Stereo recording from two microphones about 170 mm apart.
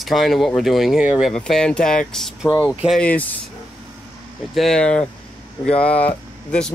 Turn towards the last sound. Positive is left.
turn(degrees=5)  # may be behind; listen again after turning